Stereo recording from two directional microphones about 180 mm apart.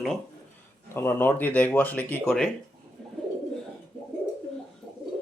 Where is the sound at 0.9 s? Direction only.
10° left (ahead or behind).